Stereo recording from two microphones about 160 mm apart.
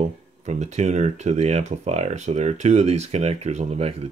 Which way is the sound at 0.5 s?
45° right (ahead or behind).